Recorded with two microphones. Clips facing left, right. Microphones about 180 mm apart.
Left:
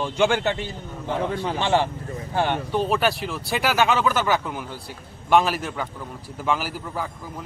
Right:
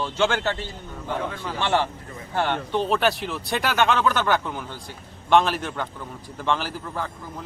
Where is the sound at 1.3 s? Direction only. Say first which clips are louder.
Left 6 dB; 30° left (ahead or behind).